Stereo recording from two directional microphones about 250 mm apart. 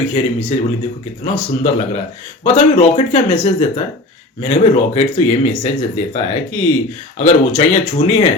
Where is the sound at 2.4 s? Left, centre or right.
Left.